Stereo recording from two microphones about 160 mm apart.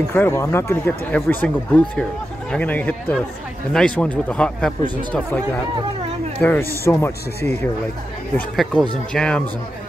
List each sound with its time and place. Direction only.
0.1 s speech: 15° left (ahead or behind)